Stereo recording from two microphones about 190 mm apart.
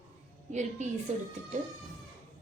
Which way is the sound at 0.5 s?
40° right (ahead or behind).